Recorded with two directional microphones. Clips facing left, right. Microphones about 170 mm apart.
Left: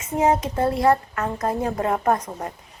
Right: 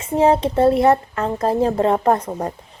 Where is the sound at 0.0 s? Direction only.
30° right (ahead or behind).